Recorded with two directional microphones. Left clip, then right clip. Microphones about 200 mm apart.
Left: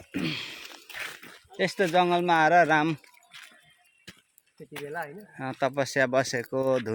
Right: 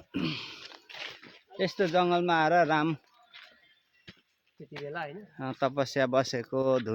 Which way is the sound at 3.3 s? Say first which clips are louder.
Left 4 dB; 60° left (ahead or behind).